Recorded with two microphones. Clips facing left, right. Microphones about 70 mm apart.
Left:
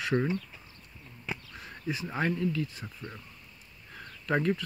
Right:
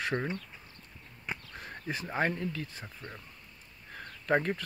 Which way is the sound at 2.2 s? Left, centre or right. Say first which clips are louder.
Left 3 dB; right.